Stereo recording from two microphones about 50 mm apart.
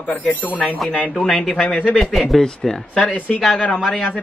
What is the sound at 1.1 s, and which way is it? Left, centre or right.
Speech, centre.